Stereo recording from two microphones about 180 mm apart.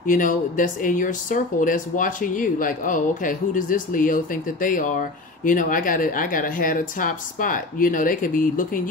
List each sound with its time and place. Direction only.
0.0 s speech: 45° left (ahead or behind)